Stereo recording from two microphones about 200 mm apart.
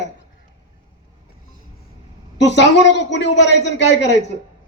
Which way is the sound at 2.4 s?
60° left (ahead or behind).